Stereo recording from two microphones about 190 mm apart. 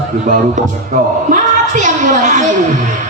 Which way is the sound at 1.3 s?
40° right (ahead or behind).